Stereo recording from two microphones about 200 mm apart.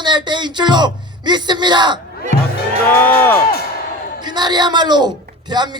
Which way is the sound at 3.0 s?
10° left (ahead or behind).